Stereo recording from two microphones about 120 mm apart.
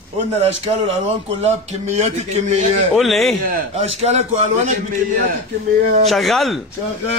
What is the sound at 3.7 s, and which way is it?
Speech, 60° right (ahead or behind).